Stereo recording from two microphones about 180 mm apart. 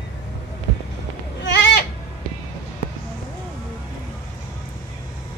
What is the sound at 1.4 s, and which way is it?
Sheep, 75° left (ahead or behind).